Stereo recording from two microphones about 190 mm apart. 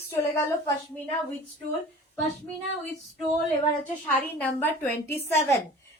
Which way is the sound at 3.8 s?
10° left (ahead or behind).